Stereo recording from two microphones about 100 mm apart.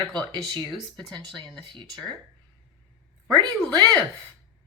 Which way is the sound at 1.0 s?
45° right (ahead or behind).